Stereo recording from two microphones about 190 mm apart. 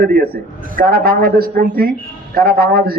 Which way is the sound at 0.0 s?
55° right (ahead or behind).